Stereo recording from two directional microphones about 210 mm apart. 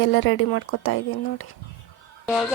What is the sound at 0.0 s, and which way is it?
Speech, 60° left (ahead or behind).